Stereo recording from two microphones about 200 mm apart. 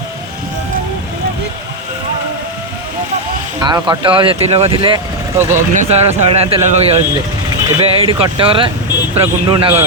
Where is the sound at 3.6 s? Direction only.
20° right (ahead or behind).